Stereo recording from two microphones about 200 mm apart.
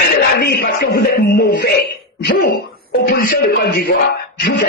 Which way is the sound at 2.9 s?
50° left (ahead or behind).